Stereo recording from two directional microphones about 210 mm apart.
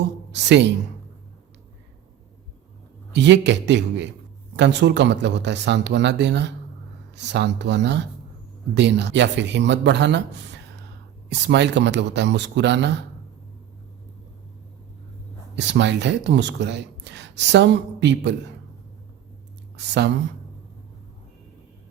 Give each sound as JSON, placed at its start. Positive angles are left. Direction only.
{"t": 0.3, "sound": "a woman's voice", "side_deg": -55}
{"t": 3.1, "sound": "speech", "side_deg": -55}
{"t": 15.5, "sound": "speech", "side_deg": -55}
{"t": 19.7, "sound": "a woman's voice", "side_deg": -55}